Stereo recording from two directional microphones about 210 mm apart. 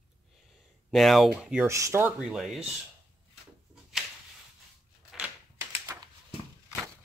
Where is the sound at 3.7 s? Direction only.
Centre (ahead or behind).